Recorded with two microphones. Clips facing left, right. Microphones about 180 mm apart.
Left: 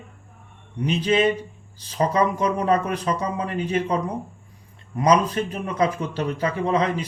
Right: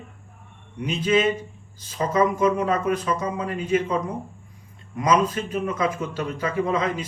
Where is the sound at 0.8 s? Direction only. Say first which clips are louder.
Left 1 dB; 35° left (ahead or behind).